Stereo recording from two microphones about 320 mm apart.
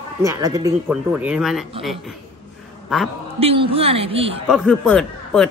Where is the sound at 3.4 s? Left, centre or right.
Centre.